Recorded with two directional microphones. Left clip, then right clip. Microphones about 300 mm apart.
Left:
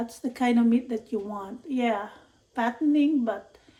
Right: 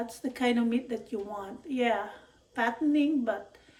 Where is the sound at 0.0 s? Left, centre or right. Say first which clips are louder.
Left 2 dB; centre.